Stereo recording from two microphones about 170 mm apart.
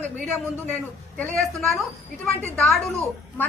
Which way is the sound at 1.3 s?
Centre (ahead or behind).